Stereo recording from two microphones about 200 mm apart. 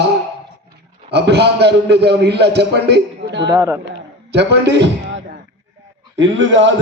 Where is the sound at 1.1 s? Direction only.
55° right (ahead or behind).